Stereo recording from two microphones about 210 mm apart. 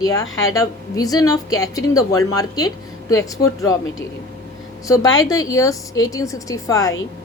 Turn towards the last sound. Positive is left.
turn(degrees=15)  # may be behind; listen again after turning